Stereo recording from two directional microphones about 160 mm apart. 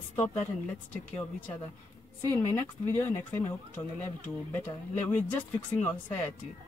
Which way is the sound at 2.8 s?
15° left (ahead or behind).